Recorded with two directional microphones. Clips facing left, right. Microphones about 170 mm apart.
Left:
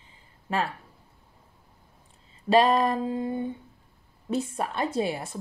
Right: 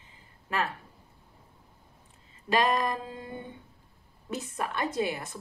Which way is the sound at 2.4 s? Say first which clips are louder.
Left 6 dB; 30° left (ahead or behind).